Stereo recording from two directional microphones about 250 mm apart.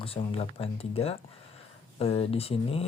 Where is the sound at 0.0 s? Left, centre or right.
Left.